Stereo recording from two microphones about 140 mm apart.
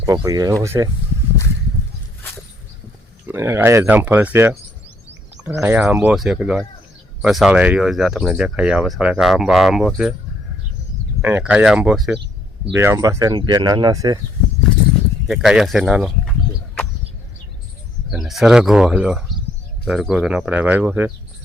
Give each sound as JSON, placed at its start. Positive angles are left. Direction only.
{"t": 0.3, "sound": "speech", "side_deg": -25}
{"t": 3.2, "sound": "speech", "side_deg": -15}
{"t": 5.5, "sound": "speech", "side_deg": -15}
{"t": 6.1, "sound": "speech", "side_deg": -5}
{"t": 11.2, "sound": "speech", "side_deg": -10}
{"t": 12.7, "sound": "speech", "side_deg": -20}
{"t": 15.3, "sound": "speech", "side_deg": -5}
{"t": 18.1, "sound": "speech", "side_deg": 0}